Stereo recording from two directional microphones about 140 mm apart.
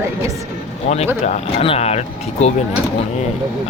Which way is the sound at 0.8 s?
50° left (ahead or behind).